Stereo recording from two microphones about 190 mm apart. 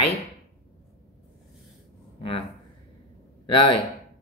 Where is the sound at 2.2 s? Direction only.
30° left (ahead or behind).